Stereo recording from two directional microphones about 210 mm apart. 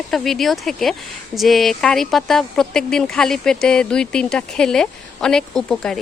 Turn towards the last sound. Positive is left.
turn(degrees=5)  # may be behind; listen again after turning